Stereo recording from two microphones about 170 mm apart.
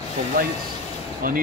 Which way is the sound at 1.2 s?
60° right (ahead or behind).